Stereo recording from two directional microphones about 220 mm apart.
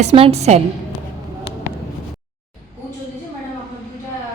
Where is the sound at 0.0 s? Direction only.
30° right (ahead or behind).